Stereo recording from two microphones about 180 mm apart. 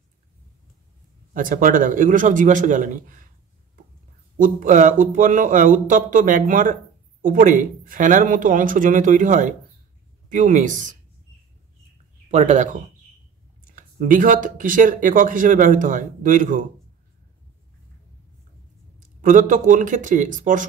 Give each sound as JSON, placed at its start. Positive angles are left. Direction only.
{"t": 1.3, "sound": "speech", "side_deg": -45}
{"t": 4.4, "sound": "speech", "side_deg": -45}
{"t": 12.3, "sound": "speech", "side_deg": -40}
{"t": 13.7, "sound": "speech", "side_deg": -45}
{"t": 18.9, "sound": "speech", "side_deg": -50}